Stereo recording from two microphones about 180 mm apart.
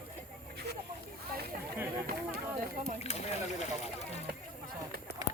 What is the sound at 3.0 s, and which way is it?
Speech, 35° left (ahead or behind).